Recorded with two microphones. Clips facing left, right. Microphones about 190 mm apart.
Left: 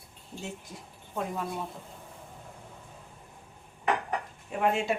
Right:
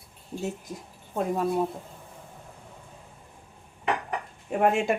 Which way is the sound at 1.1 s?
40° right (ahead or behind).